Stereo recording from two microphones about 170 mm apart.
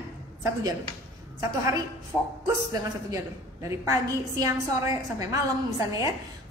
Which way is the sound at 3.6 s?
20° right (ahead or behind).